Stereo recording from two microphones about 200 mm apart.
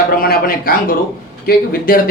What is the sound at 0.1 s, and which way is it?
Speech, 50° left (ahead or behind).